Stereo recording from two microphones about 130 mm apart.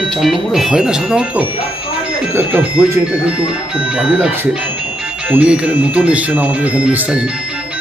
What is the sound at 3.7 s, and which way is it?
Speech, 10° right (ahead or behind).